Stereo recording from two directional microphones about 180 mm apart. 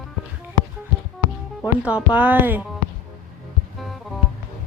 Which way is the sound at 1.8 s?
10° right (ahead or behind).